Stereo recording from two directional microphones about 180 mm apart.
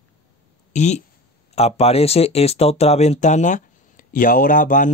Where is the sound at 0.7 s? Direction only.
40° left (ahead or behind).